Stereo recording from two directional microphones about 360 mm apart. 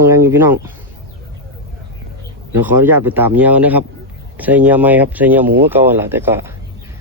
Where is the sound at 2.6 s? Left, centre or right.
Centre.